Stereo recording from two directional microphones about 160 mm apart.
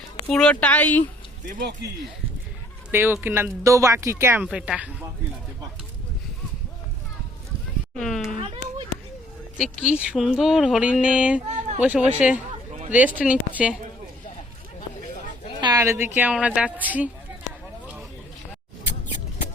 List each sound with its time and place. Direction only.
0.3 s a woman's voice: 5° left (ahead or behind)
1.5 s speech: 90° right
2.9 s speech: 15° right (ahead or behind)
4.4 s a woman's voice: 5° right (ahead or behind)
7.9 s a woman's voice: 5° left (ahead or behind)
9.6 s speech: 5° right (ahead or behind)
15.6 s speech: 20° right (ahead or behind)